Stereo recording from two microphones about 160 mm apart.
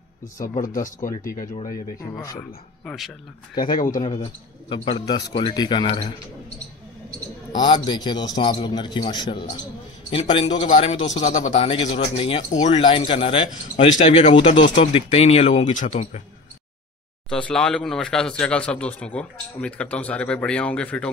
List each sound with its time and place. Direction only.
0.2 s speech: 55° left (ahead or behind)
1.7 s a man's voice: 20° left (ahead or behind)
2.8 s speech: 5° left (ahead or behind)
3.7 s speech: 55° left (ahead or behind)
4.0 s speech: 30° left (ahead or behind)
7.5 s a man's voice: 30° left (ahead or behind)
10.7 s speech: 40° left (ahead or behind)
12.8 s speech: 30° left (ahead or behind)
17.3 s speech: 5° left (ahead or behind)